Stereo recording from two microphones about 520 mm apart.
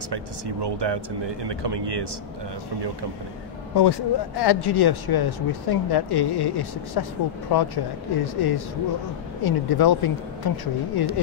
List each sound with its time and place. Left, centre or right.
0.1 s speech: right
3.7 s speech: left